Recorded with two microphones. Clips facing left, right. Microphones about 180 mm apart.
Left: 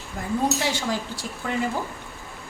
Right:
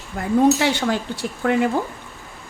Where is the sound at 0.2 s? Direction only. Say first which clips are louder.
Right 8 dB; 65° right (ahead or behind).